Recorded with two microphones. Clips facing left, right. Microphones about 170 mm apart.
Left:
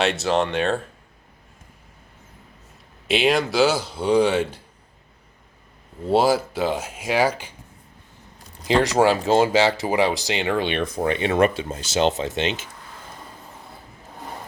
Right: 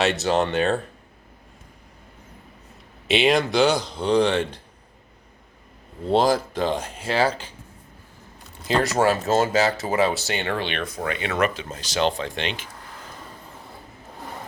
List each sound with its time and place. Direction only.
0.0 s speech: centre (ahead or behind)
3.1 s speech: centre (ahead or behind)
6.1 s speech: 5° left (ahead or behind)
8.6 s speech: 15° left (ahead or behind)